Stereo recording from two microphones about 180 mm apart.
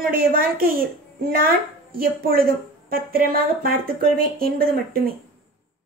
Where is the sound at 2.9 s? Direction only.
55° right (ahead or behind).